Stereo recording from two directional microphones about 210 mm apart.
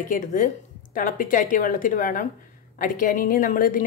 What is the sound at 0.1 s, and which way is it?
A woman's voice, 40° left (ahead or behind).